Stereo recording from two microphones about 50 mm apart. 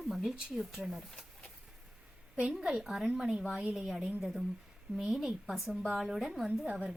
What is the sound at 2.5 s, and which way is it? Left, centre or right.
Speech, centre.